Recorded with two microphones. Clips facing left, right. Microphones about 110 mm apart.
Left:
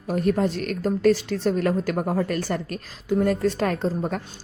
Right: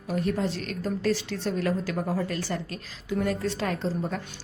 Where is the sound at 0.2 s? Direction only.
50° left (ahead or behind).